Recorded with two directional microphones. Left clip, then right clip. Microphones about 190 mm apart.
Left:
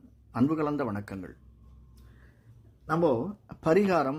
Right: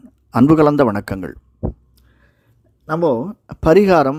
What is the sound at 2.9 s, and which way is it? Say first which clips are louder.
Speech: right 9 dB; 40° right (ahead or behind).